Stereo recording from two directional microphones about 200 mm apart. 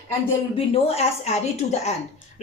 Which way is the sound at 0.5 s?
30° left (ahead or behind).